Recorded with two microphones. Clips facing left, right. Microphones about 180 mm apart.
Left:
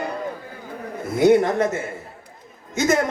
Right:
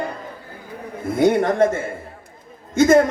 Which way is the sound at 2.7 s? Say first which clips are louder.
Right 7 dB; 50° right (ahead or behind).